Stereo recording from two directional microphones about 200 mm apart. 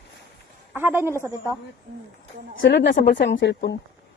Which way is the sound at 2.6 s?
60° left (ahead or behind).